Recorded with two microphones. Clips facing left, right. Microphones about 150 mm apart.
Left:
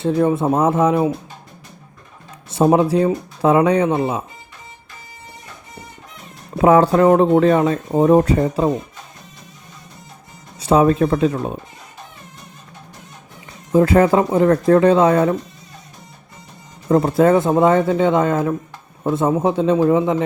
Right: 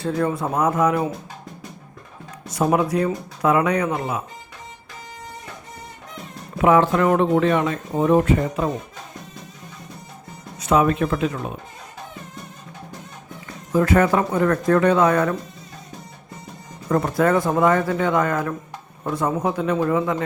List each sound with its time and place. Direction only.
0.0 s speech: 20° left (ahead or behind)
2.5 s speech: 25° left (ahead or behind)
6.6 s speech: 35° left (ahead or behind)
10.6 s speech: 30° left (ahead or behind)
13.7 s speech: 30° left (ahead or behind)
16.9 s speech: 25° left (ahead or behind)